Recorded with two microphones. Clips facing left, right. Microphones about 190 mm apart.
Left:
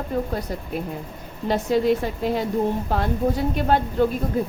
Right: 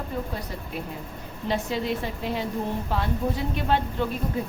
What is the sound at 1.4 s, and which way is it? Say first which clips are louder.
A woman's voice: left 7 dB; 45° left (ahead or behind).